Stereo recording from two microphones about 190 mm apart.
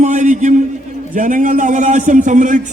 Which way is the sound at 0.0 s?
40° right (ahead or behind).